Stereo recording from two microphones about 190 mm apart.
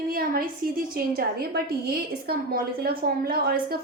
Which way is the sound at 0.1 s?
50° right (ahead or behind).